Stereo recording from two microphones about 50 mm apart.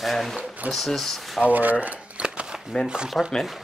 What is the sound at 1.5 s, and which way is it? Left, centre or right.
Speech, right.